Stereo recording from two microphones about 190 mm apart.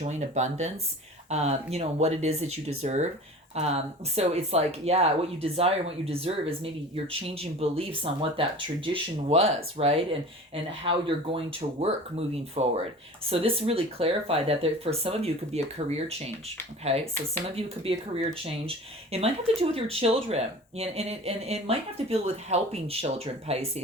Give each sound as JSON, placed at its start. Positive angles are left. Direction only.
{"t": 0.0, "sound": "speech", "side_deg": -40}
{"t": 16.9, "sound": "speech", "side_deg": -35}